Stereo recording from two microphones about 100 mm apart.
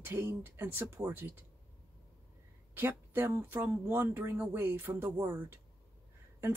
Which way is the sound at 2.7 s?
20° right (ahead or behind).